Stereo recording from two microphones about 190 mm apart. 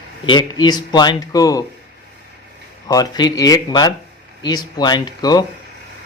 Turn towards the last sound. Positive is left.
turn(degrees=20)  # may be behind; listen again after turning